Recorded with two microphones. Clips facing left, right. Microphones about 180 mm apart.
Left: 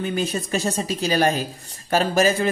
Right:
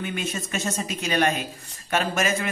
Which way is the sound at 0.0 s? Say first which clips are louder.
Left 5 dB; 35° left (ahead or behind).